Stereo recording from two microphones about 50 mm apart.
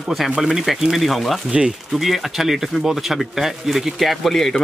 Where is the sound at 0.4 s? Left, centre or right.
Centre.